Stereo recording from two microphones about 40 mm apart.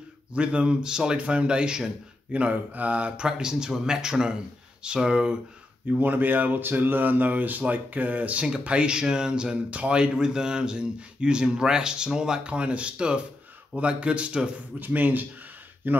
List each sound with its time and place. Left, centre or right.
0.3 s speech: right
1.1 s speech: right
2.3 s speech: right
5.9 s speech: right; by 12.4 s centre
12.4 s speech: right
14.8 s speech: right
15.8 s speech: right